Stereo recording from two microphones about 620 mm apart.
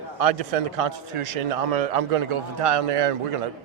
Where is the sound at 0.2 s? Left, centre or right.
Right.